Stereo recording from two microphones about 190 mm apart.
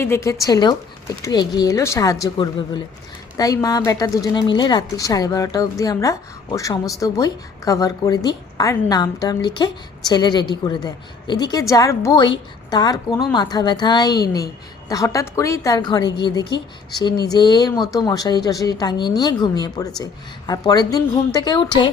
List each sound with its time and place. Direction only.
0.0 s a woman's voice: 15° left (ahead or behind)